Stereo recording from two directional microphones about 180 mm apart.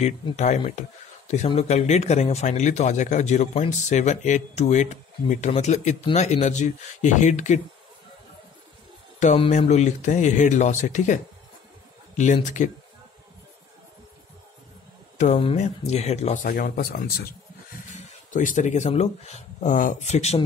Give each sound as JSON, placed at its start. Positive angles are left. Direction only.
{"t": 0.0, "sound": "speech", "side_deg": 40}
{"t": 9.2, "sound": "speech", "side_deg": 40}
{"t": 12.4, "sound": "speech", "side_deg": 45}
{"t": 15.3, "sound": "speech", "side_deg": 35}
{"t": 16.4, "sound": "speech", "side_deg": 55}